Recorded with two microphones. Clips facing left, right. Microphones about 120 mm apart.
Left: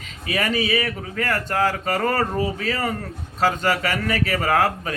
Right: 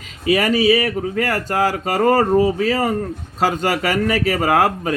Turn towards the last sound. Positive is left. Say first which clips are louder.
# right 4 dB
turn(degrees=-35)  # may be behind; listen again after turning